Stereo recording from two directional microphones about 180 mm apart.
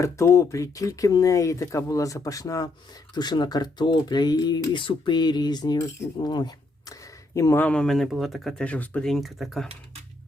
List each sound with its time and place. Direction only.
0.0 s speech: 15° left (ahead or behind); by 9.6 s centre (ahead or behind)